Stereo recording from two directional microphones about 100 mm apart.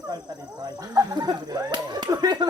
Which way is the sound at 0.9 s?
45° right (ahead or behind).